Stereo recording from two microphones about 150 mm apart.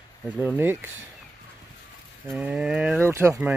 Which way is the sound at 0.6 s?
15° right (ahead or behind).